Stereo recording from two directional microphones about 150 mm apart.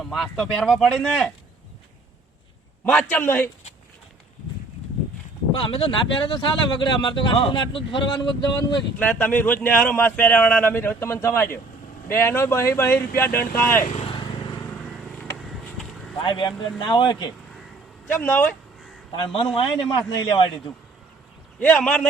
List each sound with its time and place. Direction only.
0.0 s speech: centre (ahead or behind)
2.8 s speech: 10° left (ahead or behind)
5.5 s speech: 35° left (ahead or behind)
9.0 s speech: 10° left (ahead or behind)
13.9 s vehicle: 35° left (ahead or behind)
14.8 s vehicle: centre (ahead or behind)
16.2 s speech: 35° left (ahead or behind)
18.1 s speech: 10° left (ahead or behind)
19.1 s speech: 35° left (ahead or behind)
21.6 s speech: 5° left (ahead or behind)